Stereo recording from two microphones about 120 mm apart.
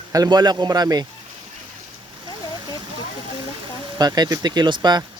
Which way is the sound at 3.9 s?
35° right (ahead or behind).